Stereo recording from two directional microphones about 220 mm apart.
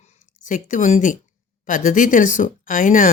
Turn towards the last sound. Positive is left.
turn(degrees=35)  # may be behind; listen again after turning